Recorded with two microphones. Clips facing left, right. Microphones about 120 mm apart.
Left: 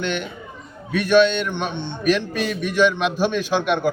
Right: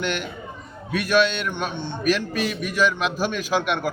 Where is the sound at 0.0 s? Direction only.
5° right (ahead or behind).